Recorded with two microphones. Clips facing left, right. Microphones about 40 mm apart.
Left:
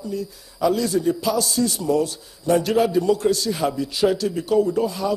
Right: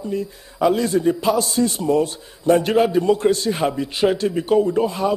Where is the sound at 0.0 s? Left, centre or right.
Right.